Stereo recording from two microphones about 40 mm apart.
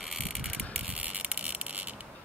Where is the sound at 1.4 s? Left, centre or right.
Right.